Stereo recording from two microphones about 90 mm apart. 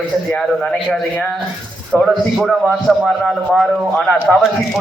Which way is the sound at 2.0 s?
Centre (ahead or behind).